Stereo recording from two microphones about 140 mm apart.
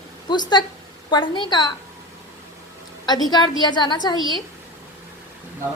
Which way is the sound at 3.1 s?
30° left (ahead or behind).